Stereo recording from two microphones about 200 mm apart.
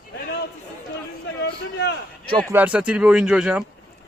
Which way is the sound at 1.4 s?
60° left (ahead or behind).